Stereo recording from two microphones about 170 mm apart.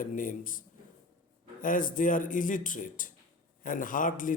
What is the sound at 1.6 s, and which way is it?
Speech, 50° left (ahead or behind).